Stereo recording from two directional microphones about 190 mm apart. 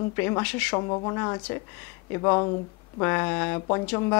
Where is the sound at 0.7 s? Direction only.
25° left (ahead or behind).